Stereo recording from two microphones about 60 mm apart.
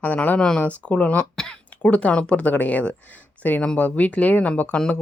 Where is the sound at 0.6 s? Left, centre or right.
Left.